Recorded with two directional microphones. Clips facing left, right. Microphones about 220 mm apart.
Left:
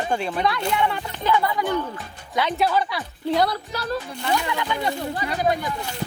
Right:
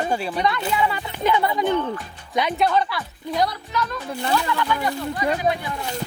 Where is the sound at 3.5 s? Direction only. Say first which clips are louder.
Even; 35° left (ahead or behind).